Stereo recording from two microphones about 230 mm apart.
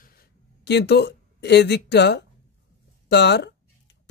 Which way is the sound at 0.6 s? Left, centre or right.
Left.